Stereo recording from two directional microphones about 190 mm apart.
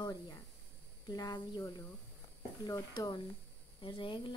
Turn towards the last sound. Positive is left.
turn(degrees=25)  # may be behind; listen again after turning